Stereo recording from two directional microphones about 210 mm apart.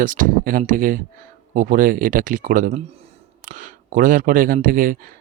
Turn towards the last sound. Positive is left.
turn(degrees=-40)  # may be behind; listen again after turning